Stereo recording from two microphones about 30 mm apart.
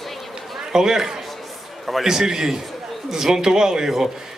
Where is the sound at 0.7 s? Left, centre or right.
Centre.